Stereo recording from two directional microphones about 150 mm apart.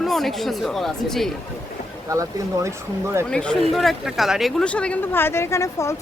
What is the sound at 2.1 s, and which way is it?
Speech, 20° right (ahead or behind).